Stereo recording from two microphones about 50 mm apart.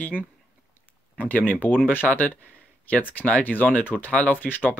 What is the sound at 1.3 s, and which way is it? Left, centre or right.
Speech, left.